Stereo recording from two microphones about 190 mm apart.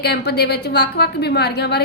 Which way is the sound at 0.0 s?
60° left (ahead or behind).